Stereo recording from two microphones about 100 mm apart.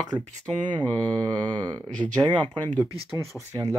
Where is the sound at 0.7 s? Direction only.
50° right (ahead or behind).